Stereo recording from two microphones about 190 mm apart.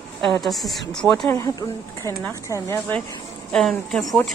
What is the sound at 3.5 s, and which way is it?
Speech, centre (ahead or behind).